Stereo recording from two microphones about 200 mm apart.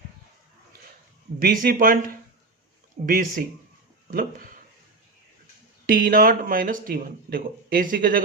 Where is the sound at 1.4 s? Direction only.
45° right (ahead or behind).